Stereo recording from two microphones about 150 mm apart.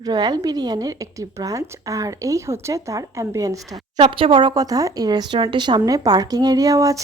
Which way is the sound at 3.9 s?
35° right (ahead or behind).